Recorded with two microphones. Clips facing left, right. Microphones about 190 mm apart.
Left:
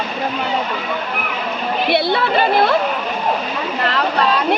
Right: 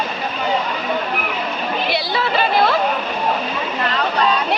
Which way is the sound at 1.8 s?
55° left (ahead or behind).